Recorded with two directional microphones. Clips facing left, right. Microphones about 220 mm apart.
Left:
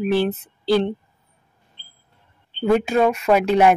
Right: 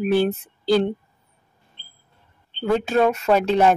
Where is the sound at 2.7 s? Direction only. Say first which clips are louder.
Left 1 dB; 15° left (ahead or behind).